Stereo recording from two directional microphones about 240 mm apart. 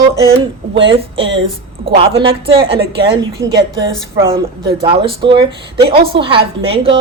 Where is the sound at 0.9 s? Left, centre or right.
Right.